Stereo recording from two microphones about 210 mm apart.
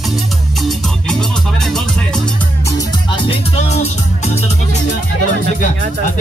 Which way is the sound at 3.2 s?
30° left (ahead or behind).